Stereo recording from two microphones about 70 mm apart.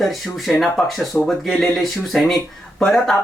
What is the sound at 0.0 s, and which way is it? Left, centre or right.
Speech, centre.